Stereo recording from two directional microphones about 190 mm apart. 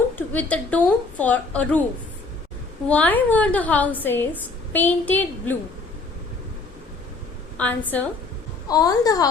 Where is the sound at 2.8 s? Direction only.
10° left (ahead or behind).